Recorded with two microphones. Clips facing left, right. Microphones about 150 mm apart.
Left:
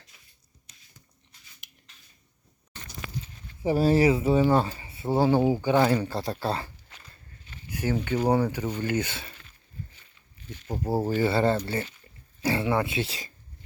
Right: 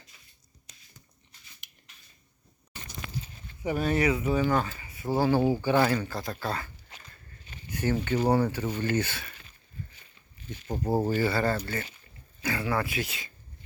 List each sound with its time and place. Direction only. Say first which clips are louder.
1.6 s a sound: left 1 dB; centre (ahead or behind)
3.6 s speech: left 5 dB; 30° left (ahead or behind)
7.7 s speech: even; 10° left (ahead or behind)
10.7 s speech: even; 10° left (ahead or behind)
11.2 s speech: left 3 dB; 25° left (ahead or behind)